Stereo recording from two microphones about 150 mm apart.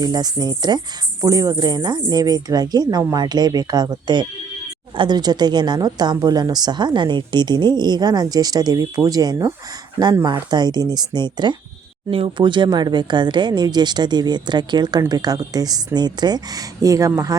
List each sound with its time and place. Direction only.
0.0 s a woman's voice: 25° right (ahead or behind)